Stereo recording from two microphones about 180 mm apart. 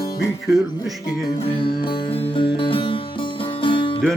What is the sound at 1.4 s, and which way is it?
Music, 30° left (ahead or behind).